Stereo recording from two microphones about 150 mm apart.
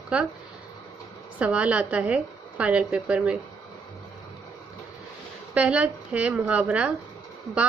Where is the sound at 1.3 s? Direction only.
10° right (ahead or behind).